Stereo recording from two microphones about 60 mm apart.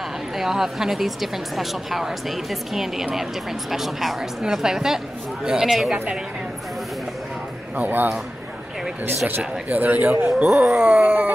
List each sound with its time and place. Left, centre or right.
0.4 s a woman's voice: centre
7.7 s speech: right
9.7 s speech: right
10.1 s a sound: right